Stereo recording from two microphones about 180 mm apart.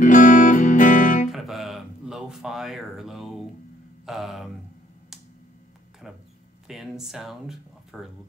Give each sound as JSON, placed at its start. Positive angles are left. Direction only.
{"t": 0.0, "sound": "music", "side_deg": 45}
{"t": 1.3, "sound": "speech", "side_deg": 0}
{"t": 6.0, "sound": "speech", "side_deg": 0}